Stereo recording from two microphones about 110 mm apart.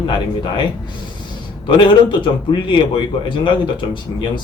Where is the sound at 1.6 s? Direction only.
45° left (ahead or behind).